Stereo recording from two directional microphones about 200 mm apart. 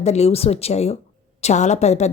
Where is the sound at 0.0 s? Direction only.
30° left (ahead or behind).